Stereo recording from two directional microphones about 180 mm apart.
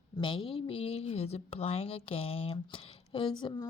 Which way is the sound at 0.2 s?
30° left (ahead or behind).